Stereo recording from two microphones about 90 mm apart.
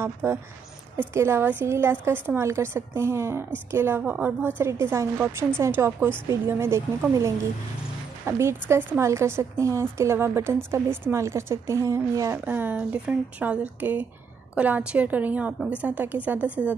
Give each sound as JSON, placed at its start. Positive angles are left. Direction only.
{"t": 0.0, "sound": "a woman's voice", "side_deg": -25}
{"t": 12.4, "sound": "a woman's voice", "side_deg": -20}